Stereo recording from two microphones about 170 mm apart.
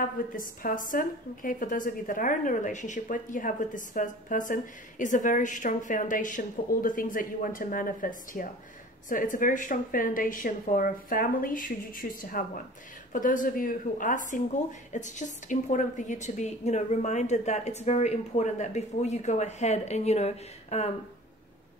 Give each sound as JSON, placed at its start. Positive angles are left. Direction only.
{"t": 0.4, "sound": "a woman's voice", "side_deg": 55}